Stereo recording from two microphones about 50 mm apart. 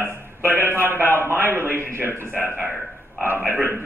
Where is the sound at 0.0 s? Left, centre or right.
Right.